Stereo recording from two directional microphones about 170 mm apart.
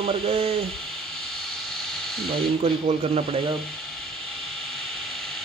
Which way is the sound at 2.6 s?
35° right (ahead or behind).